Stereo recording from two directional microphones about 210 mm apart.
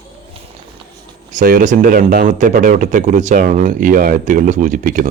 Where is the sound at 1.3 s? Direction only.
40° right (ahead or behind).